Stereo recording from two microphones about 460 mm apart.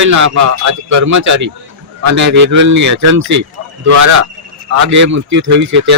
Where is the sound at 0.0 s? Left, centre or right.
Right.